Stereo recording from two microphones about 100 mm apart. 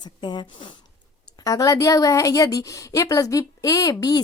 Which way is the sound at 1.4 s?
35° left (ahead or behind).